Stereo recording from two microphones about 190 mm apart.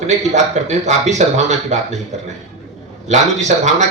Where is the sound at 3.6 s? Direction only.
40° right (ahead or behind).